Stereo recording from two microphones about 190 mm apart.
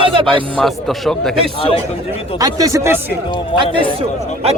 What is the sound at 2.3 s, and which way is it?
Speech, 20° right (ahead or behind).